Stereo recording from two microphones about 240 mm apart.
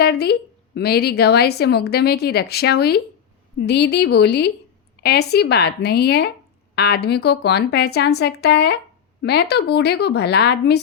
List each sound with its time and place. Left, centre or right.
0.0 s a woman's voice: left